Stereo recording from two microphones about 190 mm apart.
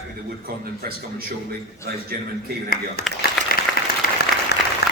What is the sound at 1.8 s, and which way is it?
Speech, 55° right (ahead or behind).